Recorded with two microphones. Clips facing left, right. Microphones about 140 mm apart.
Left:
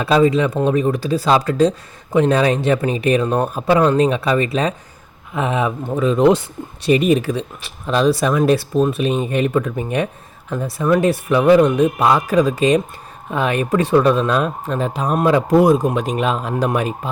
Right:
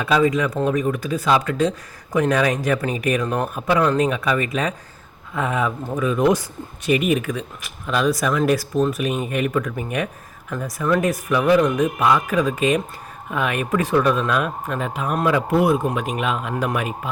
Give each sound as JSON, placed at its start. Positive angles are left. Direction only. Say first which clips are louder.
{"t": 0.0, "sound": "speech", "louder": "left 4 dB", "side_deg": 30}
{"t": 5.3, "sound": "speech", "louder": "left 3 dB", "side_deg": 20}